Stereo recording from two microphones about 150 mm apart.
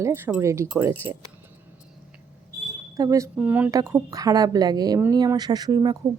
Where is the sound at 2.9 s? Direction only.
20° right (ahead or behind).